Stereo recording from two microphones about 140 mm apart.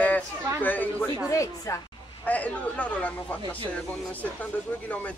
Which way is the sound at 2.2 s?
10° left (ahead or behind).